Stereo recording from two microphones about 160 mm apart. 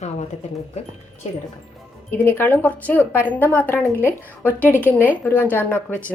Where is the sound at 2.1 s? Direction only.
10° left (ahead or behind).